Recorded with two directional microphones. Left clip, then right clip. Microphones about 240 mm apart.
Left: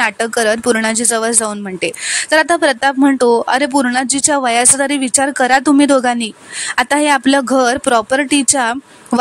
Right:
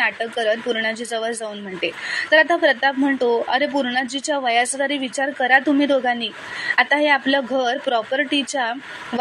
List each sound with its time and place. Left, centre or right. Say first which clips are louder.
0.0 s speech: left 6 dB; left